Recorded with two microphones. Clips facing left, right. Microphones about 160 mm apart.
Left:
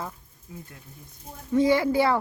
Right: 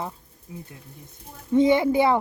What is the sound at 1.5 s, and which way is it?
Speech, 20° right (ahead or behind).